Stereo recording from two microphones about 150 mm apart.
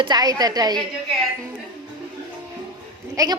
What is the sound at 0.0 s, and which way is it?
Speech, 25° right (ahead or behind).